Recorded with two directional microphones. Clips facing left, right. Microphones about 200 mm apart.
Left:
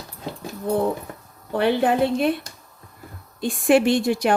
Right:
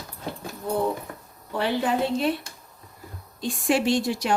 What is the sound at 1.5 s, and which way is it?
Speech, 60° left (ahead or behind).